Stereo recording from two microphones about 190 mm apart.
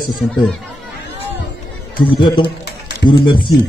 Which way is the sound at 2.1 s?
25° left (ahead or behind).